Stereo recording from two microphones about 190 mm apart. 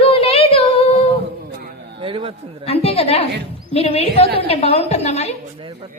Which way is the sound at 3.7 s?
30° left (ahead or behind).